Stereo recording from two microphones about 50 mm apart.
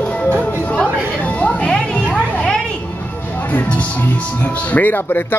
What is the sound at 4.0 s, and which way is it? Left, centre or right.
Speech, left.